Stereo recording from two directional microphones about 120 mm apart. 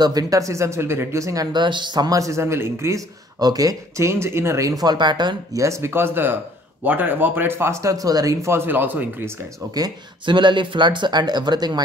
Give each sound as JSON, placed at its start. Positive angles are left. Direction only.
{"t": 0.0, "sound": "speech", "side_deg": -30}
{"t": 9.8, "sound": "speech", "side_deg": -35}